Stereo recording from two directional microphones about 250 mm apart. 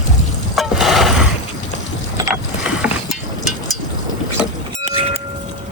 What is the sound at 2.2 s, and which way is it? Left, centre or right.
Boat, centre.